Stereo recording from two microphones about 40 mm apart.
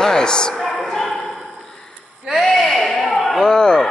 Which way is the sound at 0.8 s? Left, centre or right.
Centre.